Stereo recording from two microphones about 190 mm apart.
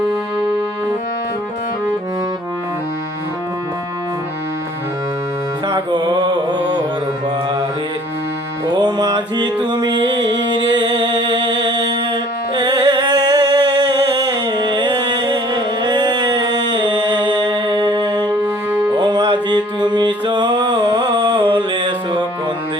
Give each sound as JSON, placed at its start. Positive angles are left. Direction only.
{"t": 5.6, "sound": "music", "side_deg": -20}
{"t": 8.6, "sound": "music", "side_deg": -20}